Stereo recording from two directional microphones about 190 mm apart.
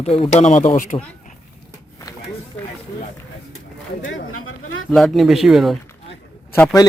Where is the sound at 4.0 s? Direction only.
90° left.